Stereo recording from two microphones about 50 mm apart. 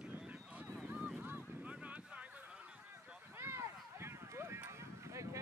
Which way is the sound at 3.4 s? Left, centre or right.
Right.